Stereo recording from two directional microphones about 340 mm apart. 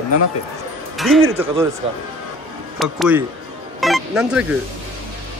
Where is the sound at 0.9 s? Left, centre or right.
Centre.